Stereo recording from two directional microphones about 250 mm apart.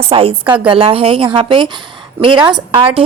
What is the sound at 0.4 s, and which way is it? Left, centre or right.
Speech, centre.